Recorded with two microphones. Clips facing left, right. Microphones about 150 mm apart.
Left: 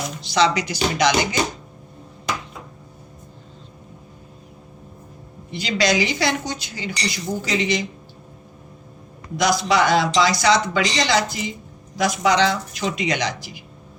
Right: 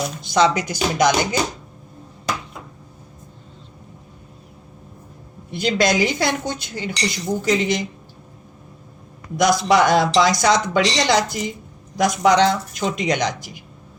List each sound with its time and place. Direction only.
0.2 s speech: 50° right (ahead or behind)
5.5 s speech: 55° right (ahead or behind)
9.4 s speech: 55° right (ahead or behind)